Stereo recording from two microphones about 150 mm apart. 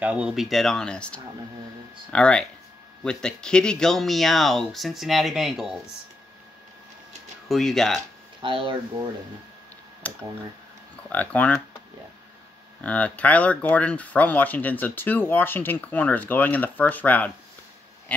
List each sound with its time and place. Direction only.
0.0 s speech: 10° right (ahead or behind)
7.4 s speech: centre (ahead or behind)
8.4 s speech: 35° right (ahead or behind)
10.0 s speech: 10° left (ahead or behind)
12.8 s speech: 10° left (ahead or behind)